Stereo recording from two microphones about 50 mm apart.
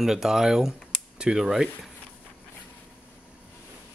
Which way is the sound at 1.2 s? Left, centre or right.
Centre.